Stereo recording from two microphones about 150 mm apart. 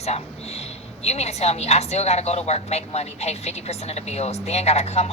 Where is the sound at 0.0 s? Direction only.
45° left (ahead or behind).